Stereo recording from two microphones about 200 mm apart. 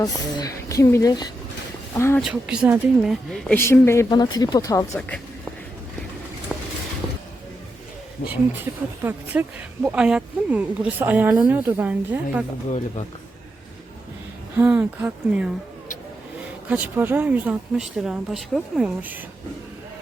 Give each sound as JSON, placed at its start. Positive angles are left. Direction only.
{"t": 0.0, "sound": "a woman's voice", "side_deg": 20}
{"t": 2.2, "sound": "a woman's voice", "side_deg": -5}
{"t": 4.9, "sound": "a woman's voice", "side_deg": 5}
{"t": 6.5, "sound": "a sound", "side_deg": 0}
{"t": 8.2, "sound": "speech", "side_deg": 50}
{"t": 9.0, "sound": "speech", "side_deg": -10}
{"t": 14.5, "sound": "speech", "side_deg": -5}
{"t": 16.6, "sound": "speech", "side_deg": -10}